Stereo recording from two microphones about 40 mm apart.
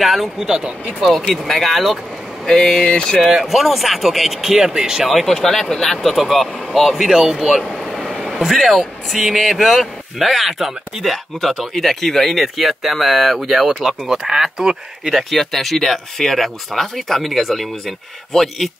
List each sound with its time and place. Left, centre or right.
0.0 s speech: centre
0.4 s speech: centre
0.8 s speech: centre
2.4 s a sound: centre
2.8 s a sound: centre
3.3 s speech: centre
5.0 s speech: centre
7.7 s air conditioning: centre
8.6 s speech: centre
15.0 s speech: centre